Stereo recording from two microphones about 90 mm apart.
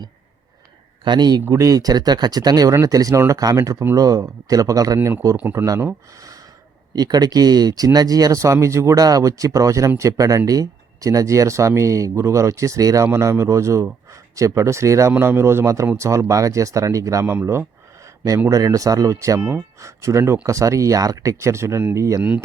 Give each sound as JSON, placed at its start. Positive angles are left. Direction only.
{"t": 1.0, "sound": "speech", "side_deg": -55}
{"t": 1.5, "sound": "speech", "side_deg": -40}
{"t": 5.4, "sound": "speech", "side_deg": -20}
{"t": 5.6, "sound": "speech", "side_deg": -35}
{"t": 17.4, "sound": "a sound", "side_deg": -30}
{"t": 18.4, "sound": "speech", "side_deg": -40}
{"t": 19.4, "sound": "speech", "side_deg": -20}
{"t": 19.8, "sound": "speech", "side_deg": -35}